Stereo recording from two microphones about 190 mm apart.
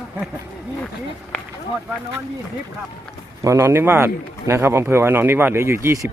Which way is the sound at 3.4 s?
15° right (ahead or behind).